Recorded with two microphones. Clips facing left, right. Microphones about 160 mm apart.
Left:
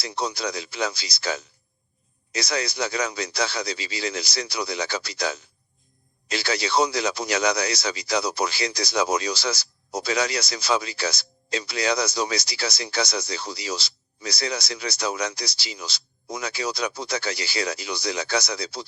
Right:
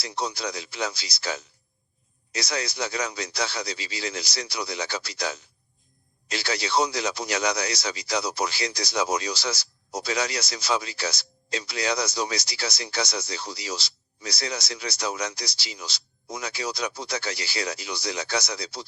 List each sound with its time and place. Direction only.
0.0 s speech: 90° left